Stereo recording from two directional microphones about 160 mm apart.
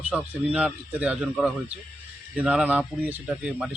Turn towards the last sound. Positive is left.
turn(degrees=-5)  # may be behind; listen again after turning